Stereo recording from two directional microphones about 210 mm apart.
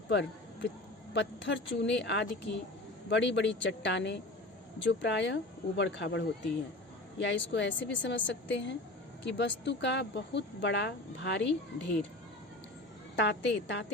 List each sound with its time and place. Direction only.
0.1 s speech: 55° left (ahead or behind)
13.1 s speech: 55° left (ahead or behind)